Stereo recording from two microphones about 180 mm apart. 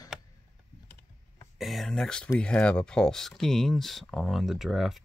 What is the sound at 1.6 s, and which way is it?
Speech, centre (ahead or behind).